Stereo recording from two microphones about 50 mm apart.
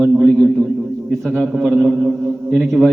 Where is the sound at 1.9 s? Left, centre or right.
Centre.